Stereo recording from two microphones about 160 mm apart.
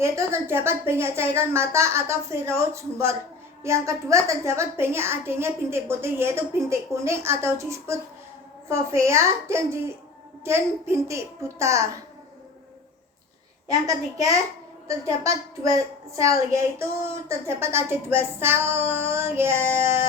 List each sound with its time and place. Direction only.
0.0 s a woman's voice: 15° right (ahead or behind)
13.7 s a child's voice: 20° right (ahead or behind)
16.1 s a woman's voice: 20° right (ahead or behind)